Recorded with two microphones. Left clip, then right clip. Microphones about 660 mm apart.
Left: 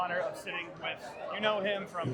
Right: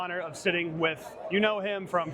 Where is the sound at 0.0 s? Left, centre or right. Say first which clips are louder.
Right 3 dB; right.